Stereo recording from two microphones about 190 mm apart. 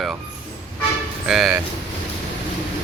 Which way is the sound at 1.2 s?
5° right (ahead or behind).